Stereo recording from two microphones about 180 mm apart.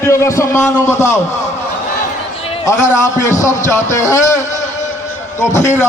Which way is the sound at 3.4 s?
45° left (ahead or behind).